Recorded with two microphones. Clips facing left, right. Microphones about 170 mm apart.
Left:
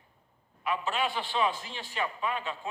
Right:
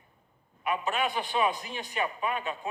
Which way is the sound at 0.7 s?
15° right (ahead or behind).